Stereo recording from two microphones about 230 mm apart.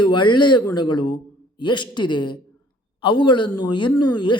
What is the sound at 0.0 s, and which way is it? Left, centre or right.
A woman's voice, centre.